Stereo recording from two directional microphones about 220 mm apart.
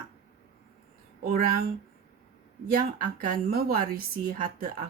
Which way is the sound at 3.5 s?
40° right (ahead or behind).